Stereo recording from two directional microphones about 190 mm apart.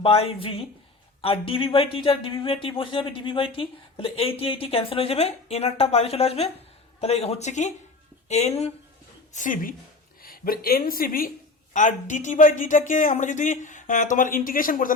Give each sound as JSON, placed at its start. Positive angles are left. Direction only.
{"t": 0.0, "sound": "a woman's voice", "side_deg": 30}